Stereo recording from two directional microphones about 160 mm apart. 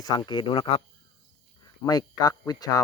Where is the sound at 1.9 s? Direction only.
25° left (ahead or behind).